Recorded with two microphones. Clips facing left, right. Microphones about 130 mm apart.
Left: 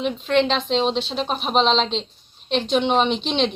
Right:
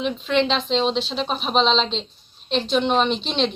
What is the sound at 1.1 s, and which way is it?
Speech, 10° left (ahead or behind).